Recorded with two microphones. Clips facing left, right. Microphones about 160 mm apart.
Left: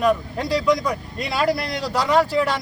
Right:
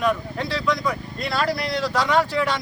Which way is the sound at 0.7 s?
15° left (ahead or behind).